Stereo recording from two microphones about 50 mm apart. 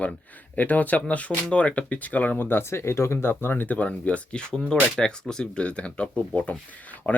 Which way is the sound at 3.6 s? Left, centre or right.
Left.